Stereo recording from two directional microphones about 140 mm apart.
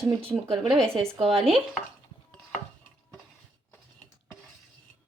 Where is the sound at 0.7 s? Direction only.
5° left (ahead or behind).